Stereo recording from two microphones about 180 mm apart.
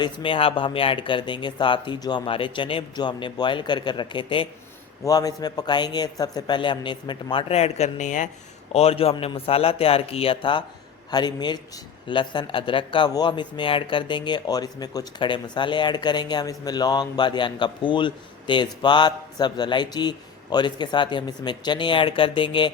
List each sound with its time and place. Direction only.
0.0 s a man's voice: 30° left (ahead or behind)